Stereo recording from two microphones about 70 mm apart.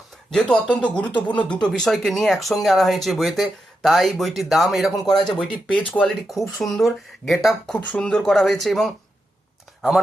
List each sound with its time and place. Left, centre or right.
0.3 s speech: centre
1.6 s speech: centre
5.7 s speech: left
6.1 s speech: centre
7.7 s speech: centre